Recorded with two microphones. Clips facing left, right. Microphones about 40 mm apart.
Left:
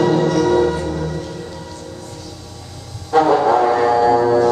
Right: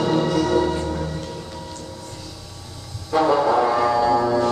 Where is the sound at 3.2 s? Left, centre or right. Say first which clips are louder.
Left 4 dB; centre.